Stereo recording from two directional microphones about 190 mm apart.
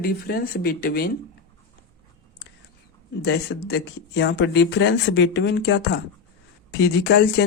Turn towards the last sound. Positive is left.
turn(degrees=65)  # may be behind; listen again after turning